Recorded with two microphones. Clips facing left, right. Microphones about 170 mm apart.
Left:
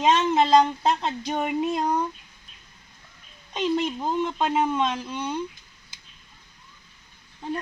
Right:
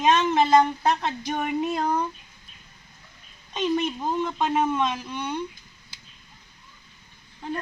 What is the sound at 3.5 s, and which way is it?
A woman's voice, 10° left (ahead or behind).